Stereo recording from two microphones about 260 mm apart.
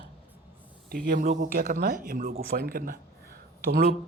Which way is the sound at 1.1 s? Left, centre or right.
Right.